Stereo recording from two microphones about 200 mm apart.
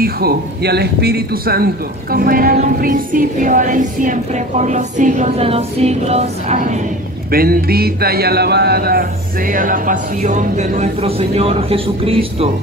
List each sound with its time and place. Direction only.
0.0 s speech: 50° right (ahead or behind)
2.1 s music: 45° right (ahead or behind)
7.2 s speech: 50° right (ahead or behind)
9.5 s music: 45° right (ahead or behind)